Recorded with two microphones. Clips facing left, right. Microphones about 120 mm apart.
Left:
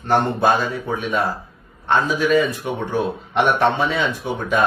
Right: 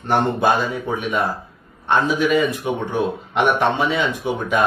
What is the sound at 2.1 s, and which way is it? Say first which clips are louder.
Speech: even; 20° right (ahead or behind).